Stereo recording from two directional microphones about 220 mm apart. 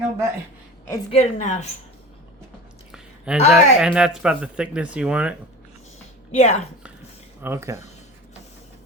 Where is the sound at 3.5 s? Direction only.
5° right (ahead or behind).